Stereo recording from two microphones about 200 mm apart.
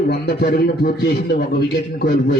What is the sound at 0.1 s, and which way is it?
A man's voice, 55° left (ahead or behind).